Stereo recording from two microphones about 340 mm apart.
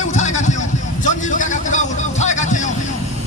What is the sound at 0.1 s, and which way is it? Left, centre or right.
Vehicle, left.